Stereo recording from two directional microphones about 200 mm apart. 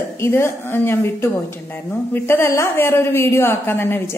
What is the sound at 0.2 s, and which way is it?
A woman's voice, 10° left (ahead or behind).